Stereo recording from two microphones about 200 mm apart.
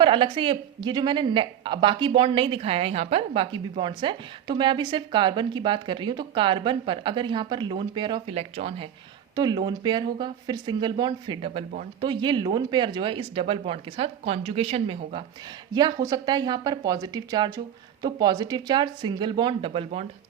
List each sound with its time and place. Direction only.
0.0 s speech: 25° right (ahead or behind)
9.3 s speech: 20° right (ahead or behind)